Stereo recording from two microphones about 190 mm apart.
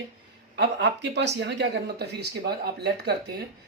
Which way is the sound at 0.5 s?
65° right (ahead or behind).